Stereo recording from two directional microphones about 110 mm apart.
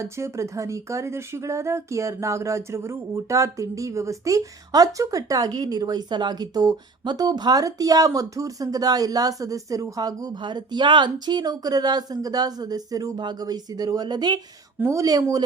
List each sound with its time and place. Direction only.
0.0 s speech: 25° right (ahead or behind)
14.8 s speech: 25° right (ahead or behind)